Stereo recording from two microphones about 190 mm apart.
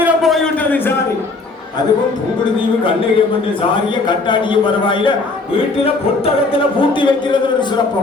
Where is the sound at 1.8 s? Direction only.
20° left (ahead or behind).